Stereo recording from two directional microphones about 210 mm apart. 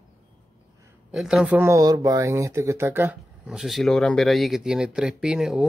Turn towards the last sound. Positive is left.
turn(degrees=-5)  # may be behind; listen again after turning